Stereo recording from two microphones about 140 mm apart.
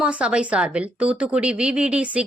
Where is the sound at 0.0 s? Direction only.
5° right (ahead or behind).